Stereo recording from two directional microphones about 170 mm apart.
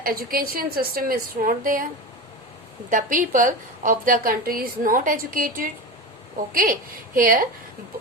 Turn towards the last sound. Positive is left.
turn(degrees=-55)  # may be behind; listen again after turning